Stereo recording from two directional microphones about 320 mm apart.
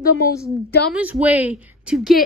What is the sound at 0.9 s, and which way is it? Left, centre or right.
Speech, centre.